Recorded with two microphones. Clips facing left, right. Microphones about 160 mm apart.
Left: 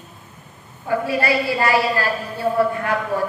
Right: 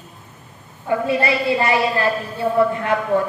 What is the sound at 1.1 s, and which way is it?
A woman's voice, 20° right (ahead or behind).